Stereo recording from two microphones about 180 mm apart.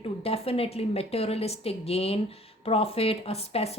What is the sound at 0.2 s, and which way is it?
A woman's voice, 35° left (ahead or behind).